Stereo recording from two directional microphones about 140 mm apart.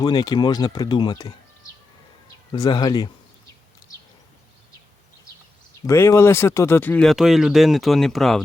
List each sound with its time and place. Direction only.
0.0 s speech: 30° left (ahead or behind)
2.5 s speech: 30° left (ahead or behind)
5.8 s speech: 20° left (ahead or behind)
7.1 s speech: centre (ahead or behind)